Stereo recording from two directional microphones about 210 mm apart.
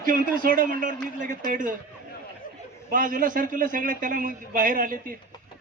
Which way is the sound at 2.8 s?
40° right (ahead or behind).